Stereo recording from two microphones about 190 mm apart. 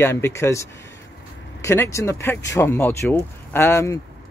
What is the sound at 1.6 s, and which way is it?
Speech, 15° left (ahead or behind).